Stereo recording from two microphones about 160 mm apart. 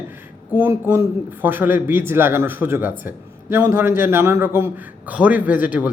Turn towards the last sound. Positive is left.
turn(degrees=-10)  # may be behind; listen again after turning